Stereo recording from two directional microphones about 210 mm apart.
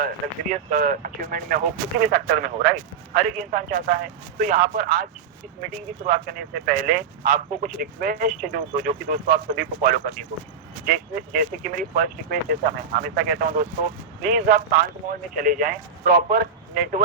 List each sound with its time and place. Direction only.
0.0 s speech: 40° right (ahead or behind)